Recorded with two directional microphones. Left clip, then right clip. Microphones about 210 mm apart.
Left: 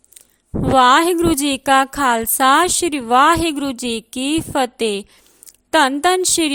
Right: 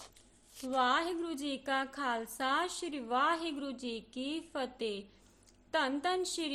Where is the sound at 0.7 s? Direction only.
50° left (ahead or behind).